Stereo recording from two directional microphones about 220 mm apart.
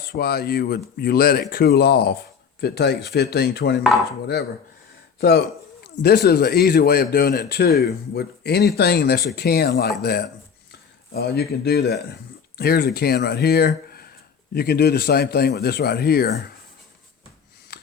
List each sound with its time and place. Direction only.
0.1 s speech: 45° left (ahead or behind)
5.8 s speech: 45° left (ahead or behind)